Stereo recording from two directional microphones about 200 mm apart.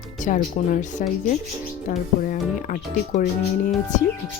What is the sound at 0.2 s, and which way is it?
Speech, 40° left (ahead or behind).